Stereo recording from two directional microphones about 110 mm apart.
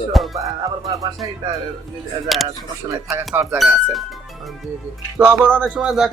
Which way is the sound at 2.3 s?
Centre (ahead or behind).